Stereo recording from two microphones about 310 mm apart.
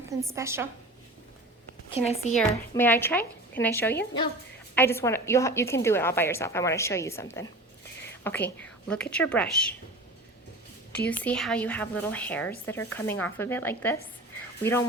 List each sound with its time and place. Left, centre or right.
0.3 s a woman's voice: centre
1.9 s a woman's voice: centre
2.3 s a woman's voice: centre
11.1 s a woman's voice: centre